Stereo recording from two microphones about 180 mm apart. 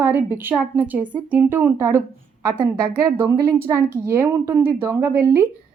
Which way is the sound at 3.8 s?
50° right (ahead or behind).